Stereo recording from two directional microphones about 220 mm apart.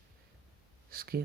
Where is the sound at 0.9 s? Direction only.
40° right (ahead or behind).